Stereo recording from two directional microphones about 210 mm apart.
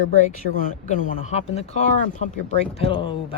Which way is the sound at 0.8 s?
30° left (ahead or behind).